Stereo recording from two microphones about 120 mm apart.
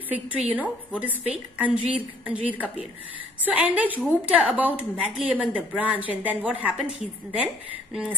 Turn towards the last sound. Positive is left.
turn(degrees=-10)  # may be behind; listen again after turning